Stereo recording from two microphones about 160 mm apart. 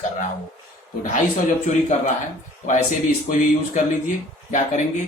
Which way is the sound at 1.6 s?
45° left (ahead or behind).